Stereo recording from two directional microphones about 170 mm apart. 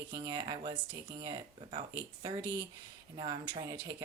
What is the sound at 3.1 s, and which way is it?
Speech, 30° right (ahead or behind).